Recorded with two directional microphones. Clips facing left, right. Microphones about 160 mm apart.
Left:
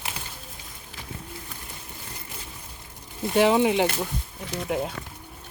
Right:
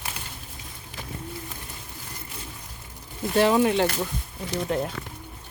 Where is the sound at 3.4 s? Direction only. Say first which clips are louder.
Even; 15° left (ahead or behind).